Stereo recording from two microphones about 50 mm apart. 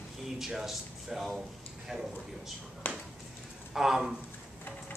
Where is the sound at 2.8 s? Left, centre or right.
Left.